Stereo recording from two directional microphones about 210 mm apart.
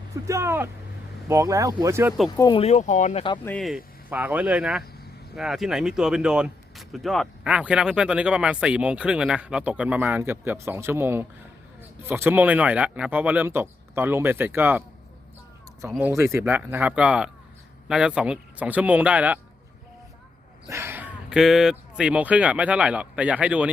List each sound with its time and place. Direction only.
0.3 s speech: 10° right (ahead or behind)
2.3 s speech: 20° left (ahead or behind)
3.4 s speech: 5° left (ahead or behind)
15.9 s speech: 10° right (ahead or behind)
20.7 s speech: 10° right (ahead or behind)